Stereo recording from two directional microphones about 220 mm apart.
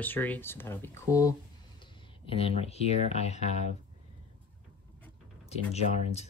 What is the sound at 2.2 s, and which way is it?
Speech, 25° left (ahead or behind).